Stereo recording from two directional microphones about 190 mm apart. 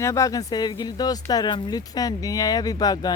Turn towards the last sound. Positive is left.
turn(degrees=20)  # may be behind; listen again after turning